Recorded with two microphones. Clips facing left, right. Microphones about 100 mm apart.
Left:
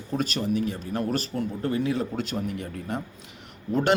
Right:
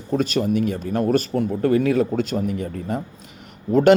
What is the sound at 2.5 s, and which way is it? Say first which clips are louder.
A man's voice: right 6 dB; 40° right (ahead or behind).